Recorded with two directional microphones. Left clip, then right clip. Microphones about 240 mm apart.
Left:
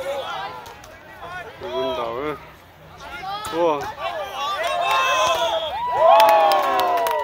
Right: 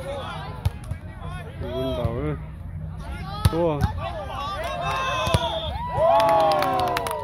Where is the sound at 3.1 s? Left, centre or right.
Right.